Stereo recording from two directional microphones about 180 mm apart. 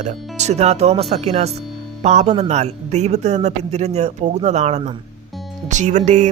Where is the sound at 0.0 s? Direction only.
40° right (ahead or behind).